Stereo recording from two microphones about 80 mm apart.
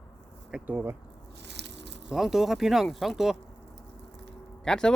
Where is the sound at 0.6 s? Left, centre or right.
Right.